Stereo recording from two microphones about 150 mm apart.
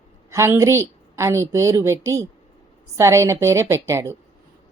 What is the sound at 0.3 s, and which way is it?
Speech, 20° right (ahead or behind).